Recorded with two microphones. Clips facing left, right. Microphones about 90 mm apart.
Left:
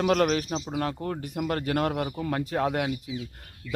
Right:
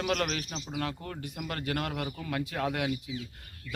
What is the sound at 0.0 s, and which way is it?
A man's voice, 35° left (ahead or behind).